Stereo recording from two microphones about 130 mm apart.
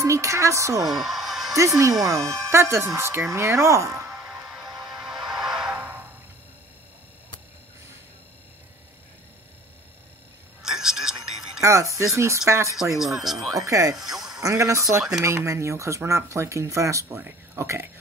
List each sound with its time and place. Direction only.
0.0 s speech: 25° right (ahead or behind)
0.8 s a sound: centre (ahead or behind)
1.5 s speech: 25° right (ahead or behind)
4.1 s music: centre (ahead or behind)
10.6 s a sound: 5° right (ahead or behind)
11.6 s speech: 25° right (ahead or behind)
12.9 s speech: 5° right (ahead or behind)
13.6 s speech: 25° right (ahead or behind)
14.1 s a sound: 5° right (ahead or behind)
14.4 s speech: 25° right (ahead or behind)